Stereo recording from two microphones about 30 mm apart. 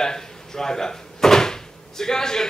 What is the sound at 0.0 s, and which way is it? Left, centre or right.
Speech, left.